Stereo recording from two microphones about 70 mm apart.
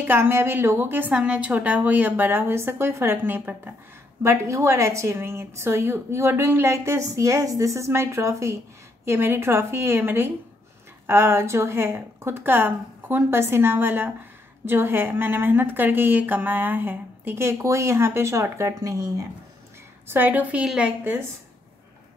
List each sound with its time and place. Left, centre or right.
0.0 s a woman's voice: right
1.1 s a woman's voice: centre
4.2 s a woman's voice: right
18.9 s speech: right
20.1 s a woman's voice: right
20.6 s a woman's voice: centre